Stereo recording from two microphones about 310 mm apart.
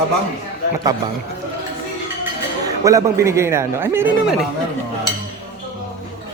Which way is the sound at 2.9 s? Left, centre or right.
Centre.